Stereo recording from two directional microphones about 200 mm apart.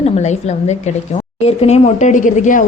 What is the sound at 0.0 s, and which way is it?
A woman's voice, 35° left (ahead or behind).